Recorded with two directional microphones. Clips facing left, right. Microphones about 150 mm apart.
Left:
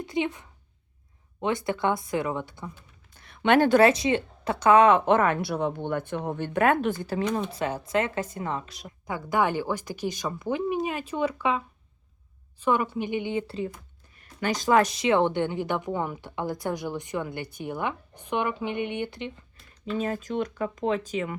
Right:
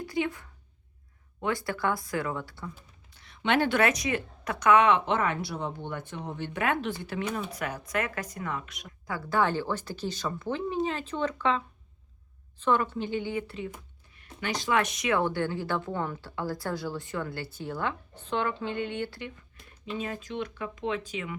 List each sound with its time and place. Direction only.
0.0 s a woman's voice: 20° left (ahead or behind)
3.2 s a woman's voice: 50° left (ahead or behind)
7.5 s speech: 25° left (ahead or behind)
9.0 s a woman's voice: 20° left (ahead or behind)
14.2 s a woman's voice: 45° left (ahead or behind); by 19.3 s 20° left (ahead or behind)
19.8 s a woman's voice: 45° left (ahead or behind)